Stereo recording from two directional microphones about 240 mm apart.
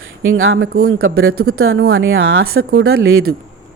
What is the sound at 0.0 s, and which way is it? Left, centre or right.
Speech, right.